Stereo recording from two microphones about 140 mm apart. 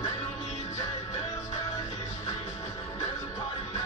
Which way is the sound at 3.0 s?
45° left (ahead or behind).